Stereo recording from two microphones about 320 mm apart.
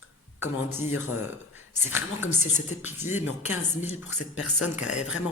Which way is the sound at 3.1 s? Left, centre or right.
Centre.